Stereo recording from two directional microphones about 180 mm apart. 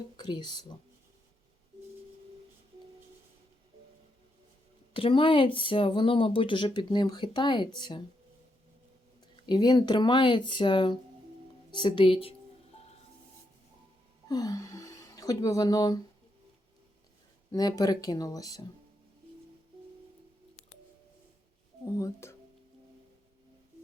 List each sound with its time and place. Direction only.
0.2 s speech: 25° left (ahead or behind)
4.9 s speech: 30° left (ahead or behind)
9.3 s speech: 25° left (ahead or behind)
12.7 s music: 35° left (ahead or behind)
14.3 s speech: 20° left (ahead or behind)
17.5 s speech: 20° left (ahead or behind)
21.8 s speech: 15° left (ahead or behind)